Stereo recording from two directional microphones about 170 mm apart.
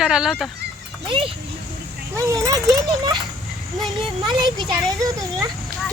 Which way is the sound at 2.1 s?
20° right (ahead or behind).